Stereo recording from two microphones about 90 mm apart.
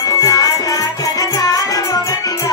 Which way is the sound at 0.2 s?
40° left (ahead or behind).